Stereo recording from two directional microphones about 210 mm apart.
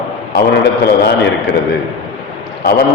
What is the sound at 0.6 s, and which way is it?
Speech, 50° left (ahead or behind).